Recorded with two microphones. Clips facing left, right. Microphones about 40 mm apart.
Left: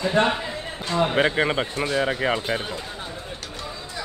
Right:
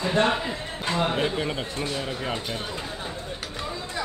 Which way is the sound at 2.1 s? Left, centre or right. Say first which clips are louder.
Left 6 dB; left.